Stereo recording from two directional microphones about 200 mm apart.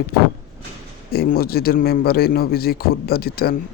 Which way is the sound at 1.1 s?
50° left (ahead or behind).